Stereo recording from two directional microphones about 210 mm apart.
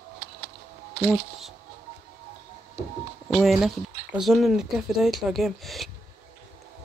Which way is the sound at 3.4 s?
Centre (ahead or behind).